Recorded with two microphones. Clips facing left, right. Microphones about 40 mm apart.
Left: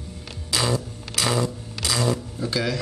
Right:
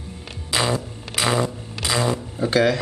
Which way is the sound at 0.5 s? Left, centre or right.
Right.